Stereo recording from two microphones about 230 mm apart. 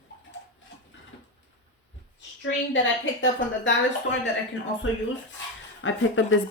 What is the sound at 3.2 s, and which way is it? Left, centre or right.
Speech, left.